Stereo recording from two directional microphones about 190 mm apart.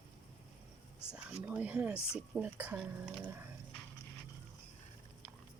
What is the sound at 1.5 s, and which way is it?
Speech, 5° right (ahead or behind).